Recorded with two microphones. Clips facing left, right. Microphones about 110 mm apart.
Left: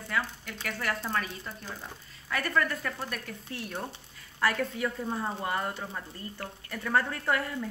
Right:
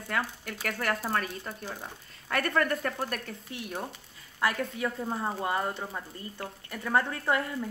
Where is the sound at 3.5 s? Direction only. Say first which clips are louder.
Even; 15° right (ahead or behind).